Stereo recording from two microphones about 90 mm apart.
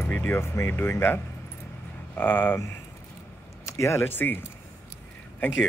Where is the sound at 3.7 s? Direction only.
30° left (ahead or behind).